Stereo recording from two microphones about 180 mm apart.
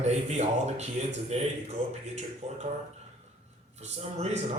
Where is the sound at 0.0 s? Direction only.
40° right (ahead or behind).